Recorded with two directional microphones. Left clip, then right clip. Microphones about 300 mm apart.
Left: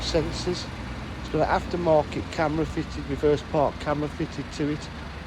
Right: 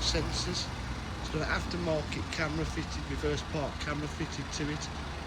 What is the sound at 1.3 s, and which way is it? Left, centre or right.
Speech, left.